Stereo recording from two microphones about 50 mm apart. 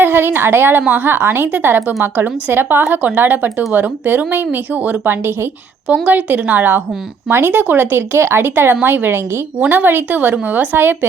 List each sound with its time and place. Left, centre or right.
0.0 s speech: right
6.1 s speech: right
9.6 s speech: right
10.8 s speech: right